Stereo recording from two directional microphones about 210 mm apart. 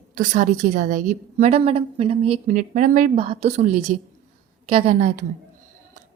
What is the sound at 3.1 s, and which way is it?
A woman's voice, 25° right (ahead or behind).